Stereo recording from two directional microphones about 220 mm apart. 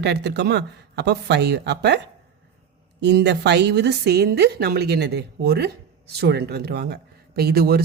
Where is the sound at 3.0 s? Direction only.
50° right (ahead or behind).